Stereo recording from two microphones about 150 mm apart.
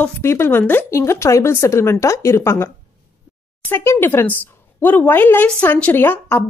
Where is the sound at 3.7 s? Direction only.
15° left (ahead or behind).